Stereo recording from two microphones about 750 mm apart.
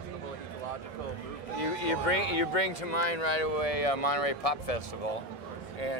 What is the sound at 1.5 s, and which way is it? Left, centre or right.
Speech, left.